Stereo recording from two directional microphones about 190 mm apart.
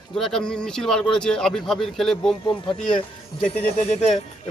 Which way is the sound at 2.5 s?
25° left (ahead or behind).